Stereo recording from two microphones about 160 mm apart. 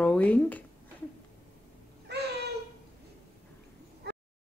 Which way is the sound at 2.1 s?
90° right.